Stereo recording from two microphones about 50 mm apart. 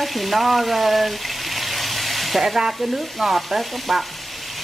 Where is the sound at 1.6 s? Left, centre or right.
Centre.